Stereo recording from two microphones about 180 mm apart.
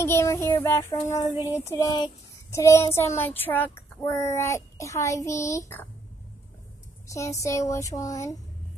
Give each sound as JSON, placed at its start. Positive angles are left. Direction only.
{"t": 0.0, "sound": "speech", "side_deg": 15}
{"t": 7.1, "sound": "speech", "side_deg": 15}